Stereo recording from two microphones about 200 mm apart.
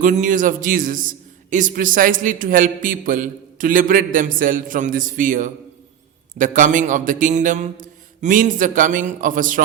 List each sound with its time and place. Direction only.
0.0 s a man's voice: 40° right (ahead or behind)